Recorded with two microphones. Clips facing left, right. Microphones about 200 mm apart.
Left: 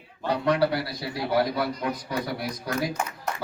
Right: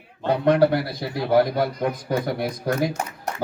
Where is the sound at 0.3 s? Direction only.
50° right (ahead or behind).